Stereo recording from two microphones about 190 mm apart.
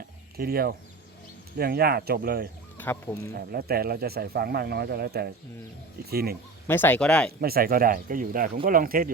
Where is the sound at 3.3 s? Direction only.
55° right (ahead or behind).